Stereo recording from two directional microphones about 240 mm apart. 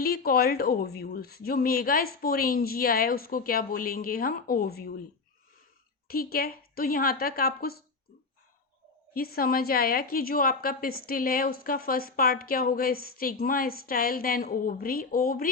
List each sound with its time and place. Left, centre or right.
0.0 s a woman's voice: left
6.1 s a woman's voice: left
9.1 s a woman's voice: left